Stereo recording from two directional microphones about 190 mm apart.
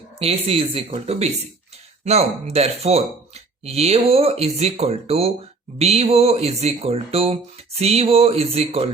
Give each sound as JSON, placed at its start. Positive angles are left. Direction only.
{"t": 0.2, "sound": "speech", "side_deg": -30}